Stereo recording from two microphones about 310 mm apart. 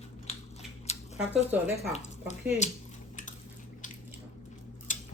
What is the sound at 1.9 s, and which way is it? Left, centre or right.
Speech, left.